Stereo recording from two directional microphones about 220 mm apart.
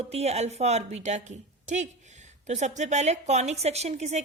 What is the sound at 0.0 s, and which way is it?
A woman's voice, 30° right (ahead or behind).